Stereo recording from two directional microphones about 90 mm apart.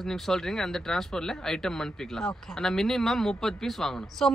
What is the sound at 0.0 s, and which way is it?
A woman's voice, 5° left (ahead or behind).